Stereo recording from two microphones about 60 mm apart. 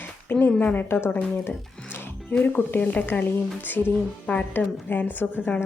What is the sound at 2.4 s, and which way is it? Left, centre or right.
A woman's voice, left.